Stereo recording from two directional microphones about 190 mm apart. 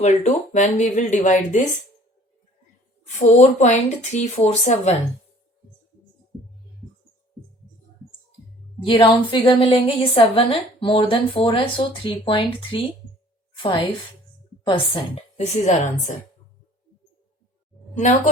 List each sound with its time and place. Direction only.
0.0 s speech: 40° left (ahead or behind)
3.2 s speech: 40° left (ahead or behind)
8.8 s a woman's voice: 25° left (ahead or behind)
13.6 s a woman's voice: 25° left (ahead or behind)
17.9 s speech: 40° left (ahead or behind)